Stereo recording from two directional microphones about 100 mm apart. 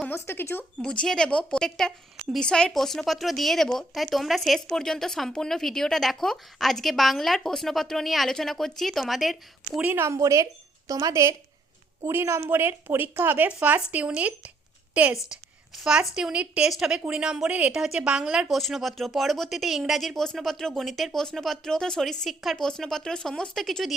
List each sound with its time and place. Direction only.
0.3 s speech: 20° left (ahead or behind)
0.8 s speech: 5° left (ahead or behind)
9.9 s a woman's voice: 25° right (ahead or behind); by 23.9 s centre (ahead or behind)